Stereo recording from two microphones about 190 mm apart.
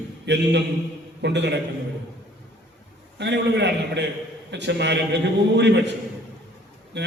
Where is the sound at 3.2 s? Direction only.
65° right (ahead or behind).